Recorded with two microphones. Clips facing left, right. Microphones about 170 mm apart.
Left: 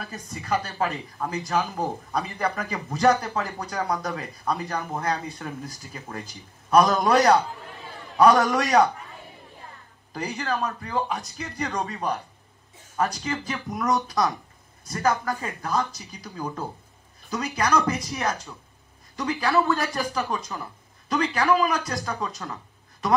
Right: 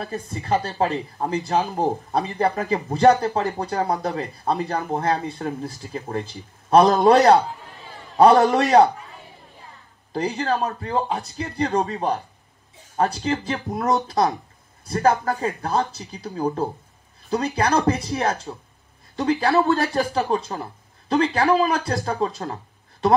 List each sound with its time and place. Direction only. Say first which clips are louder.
0.0 s speech: right 7 dB; 30° right (ahead or behind)
8.5 s speech: right 5 dB; 35° right (ahead or behind)
10.1 s speech: right 5 dB; 35° right (ahead or behind)
13.2 s speech: right 6 dB; 35° right (ahead or behind)